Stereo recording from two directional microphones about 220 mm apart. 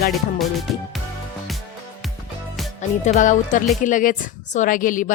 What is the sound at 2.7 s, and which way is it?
A woman's voice, 35° left (ahead or behind).